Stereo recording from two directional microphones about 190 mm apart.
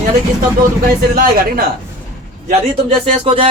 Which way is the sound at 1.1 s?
50° right (ahead or behind).